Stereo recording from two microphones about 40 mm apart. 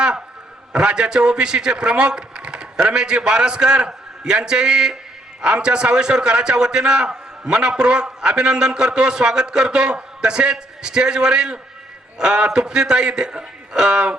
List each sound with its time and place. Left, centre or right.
0.7 s a man's voice: centre